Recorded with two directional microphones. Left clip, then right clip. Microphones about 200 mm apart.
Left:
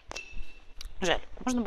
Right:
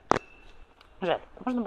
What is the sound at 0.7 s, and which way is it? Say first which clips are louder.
Speech: even; 25° left (ahead or behind).